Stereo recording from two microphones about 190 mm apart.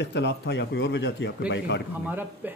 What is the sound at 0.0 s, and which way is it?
A man's voice, 65° left (ahead or behind).